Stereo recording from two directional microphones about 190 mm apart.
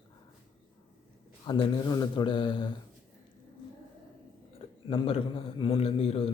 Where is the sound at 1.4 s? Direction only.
20° left (ahead or behind).